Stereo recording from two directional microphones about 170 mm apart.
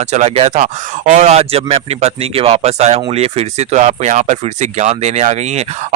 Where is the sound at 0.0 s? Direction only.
40° right (ahead or behind).